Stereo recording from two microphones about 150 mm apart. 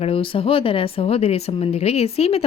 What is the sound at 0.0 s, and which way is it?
Speech, 35° left (ahead or behind).